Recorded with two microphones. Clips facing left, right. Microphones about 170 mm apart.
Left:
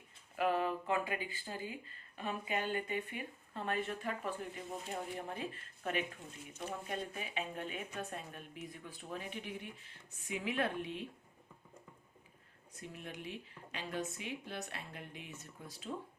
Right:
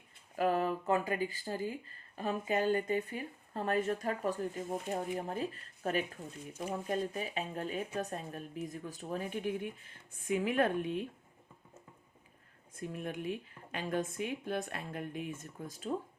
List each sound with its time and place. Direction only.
0.3 s speech: 40° right (ahead or behind)
12.7 s speech: 50° right (ahead or behind)